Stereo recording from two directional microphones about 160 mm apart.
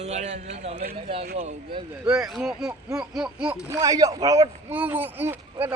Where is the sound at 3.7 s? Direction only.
20° right (ahead or behind).